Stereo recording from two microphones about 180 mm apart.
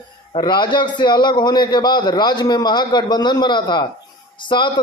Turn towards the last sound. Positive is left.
turn(degrees=25)  # may be behind; listen again after turning